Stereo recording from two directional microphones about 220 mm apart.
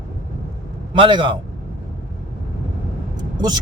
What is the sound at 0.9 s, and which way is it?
Speech, 20° right (ahead or behind).